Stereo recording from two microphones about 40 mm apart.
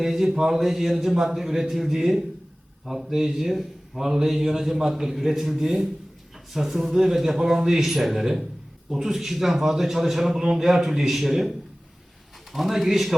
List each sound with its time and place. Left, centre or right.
0.0 s a man's voice: centre
2.8 s a man's voice: centre
3.1 s a man's voice: centre
3.3 s a man's voice: centre